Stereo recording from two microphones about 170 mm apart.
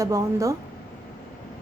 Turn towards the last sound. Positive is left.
turn(degrees=-20)  # may be behind; listen again after turning